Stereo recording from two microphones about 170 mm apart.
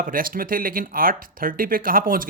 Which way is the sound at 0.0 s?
55° right (ahead or behind).